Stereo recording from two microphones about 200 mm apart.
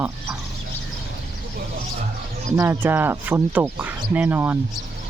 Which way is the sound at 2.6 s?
10° right (ahead or behind).